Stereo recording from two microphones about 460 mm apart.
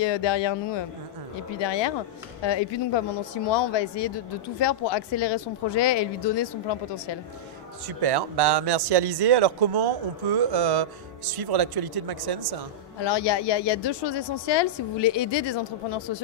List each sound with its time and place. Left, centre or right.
0.0 s speech: left
7.8 s speech: right
13.0 s speech: left